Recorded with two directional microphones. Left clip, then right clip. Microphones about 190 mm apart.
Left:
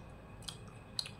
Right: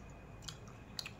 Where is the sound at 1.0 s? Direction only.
5° right (ahead or behind).